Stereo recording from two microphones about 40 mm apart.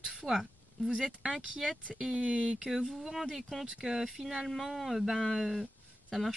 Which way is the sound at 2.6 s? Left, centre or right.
Centre.